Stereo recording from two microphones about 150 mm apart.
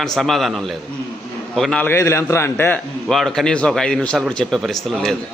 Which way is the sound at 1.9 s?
20° left (ahead or behind).